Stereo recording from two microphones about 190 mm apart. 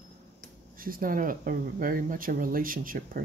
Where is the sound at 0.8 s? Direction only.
50° right (ahead or behind).